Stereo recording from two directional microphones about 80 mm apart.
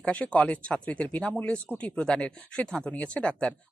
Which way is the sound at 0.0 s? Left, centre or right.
Centre.